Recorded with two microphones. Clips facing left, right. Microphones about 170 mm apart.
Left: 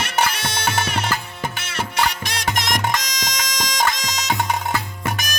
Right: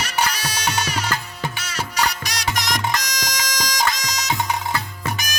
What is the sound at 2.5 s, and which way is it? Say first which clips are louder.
Music: left 2 dB; 55° left (ahead or behind).